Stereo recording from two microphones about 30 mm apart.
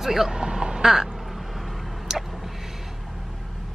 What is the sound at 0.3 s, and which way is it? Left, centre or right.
Vehicle, right.